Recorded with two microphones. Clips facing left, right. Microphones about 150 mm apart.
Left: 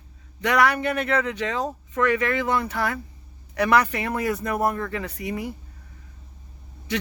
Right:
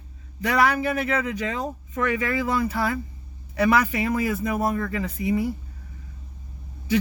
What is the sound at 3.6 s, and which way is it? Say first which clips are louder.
Speech: even; 5° right (ahead or behind).